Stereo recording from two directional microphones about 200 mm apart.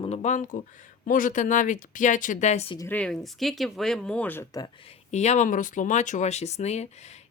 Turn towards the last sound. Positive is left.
turn(degrees=35)  # may be behind; listen again after turning